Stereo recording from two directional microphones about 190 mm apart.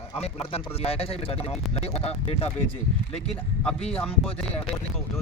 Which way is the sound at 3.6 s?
5° left (ahead or behind).